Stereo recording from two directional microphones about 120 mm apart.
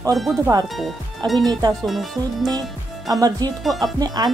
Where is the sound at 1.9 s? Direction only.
Centre (ahead or behind).